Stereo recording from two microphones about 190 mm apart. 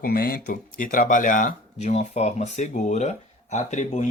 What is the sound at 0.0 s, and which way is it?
Speech, 50° left (ahead or behind).